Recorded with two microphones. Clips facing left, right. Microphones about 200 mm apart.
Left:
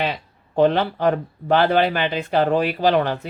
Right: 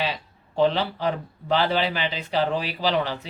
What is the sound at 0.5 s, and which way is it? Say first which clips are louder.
Speech: left 4 dB; 55° left (ahead or behind).